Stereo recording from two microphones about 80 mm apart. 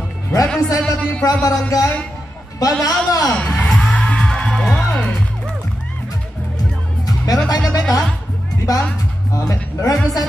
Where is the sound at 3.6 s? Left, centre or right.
Centre.